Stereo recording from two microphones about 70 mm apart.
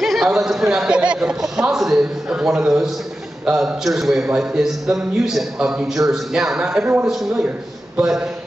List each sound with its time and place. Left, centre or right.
0.0 s a man's voice: centre
5.6 s a man's voice: centre
5.9 s a man's voice: centre